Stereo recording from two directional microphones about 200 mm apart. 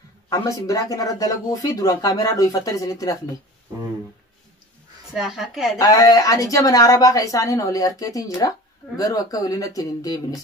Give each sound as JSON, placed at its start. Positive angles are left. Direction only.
{"t": 0.3, "sound": "a woman's voice", "side_deg": 15}
{"t": 5.1, "sound": "a woman's voice", "side_deg": 0}
{"t": 5.8, "sound": "a woman's voice", "side_deg": 20}